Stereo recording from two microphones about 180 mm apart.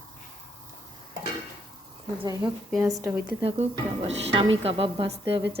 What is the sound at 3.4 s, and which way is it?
Speech, 35° right (ahead or behind).